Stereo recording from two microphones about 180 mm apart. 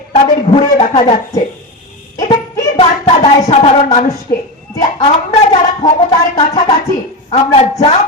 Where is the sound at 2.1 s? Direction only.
30° left (ahead or behind).